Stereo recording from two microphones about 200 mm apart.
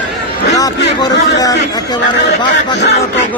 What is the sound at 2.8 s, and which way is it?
Speech, 60° left (ahead or behind).